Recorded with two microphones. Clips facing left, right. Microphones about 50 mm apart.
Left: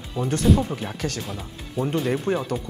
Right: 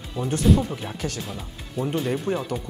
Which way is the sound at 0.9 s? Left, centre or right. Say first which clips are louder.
Left 1 dB; left.